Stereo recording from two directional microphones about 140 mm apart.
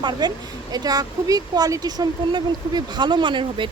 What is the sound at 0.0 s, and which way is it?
A woman's voice, 30° right (ahead or behind).